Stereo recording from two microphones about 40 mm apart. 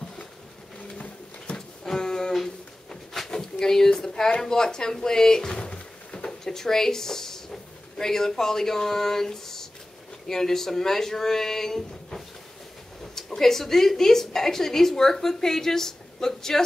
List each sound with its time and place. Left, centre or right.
1.5 s music: left
1.9 s music: centre
2.3 s a sound: centre
4.4 s a woman's voice: centre